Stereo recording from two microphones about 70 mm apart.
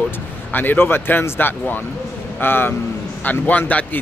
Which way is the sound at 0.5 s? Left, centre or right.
Left.